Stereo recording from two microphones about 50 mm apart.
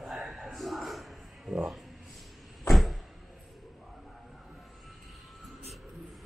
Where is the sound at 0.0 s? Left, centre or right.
Centre.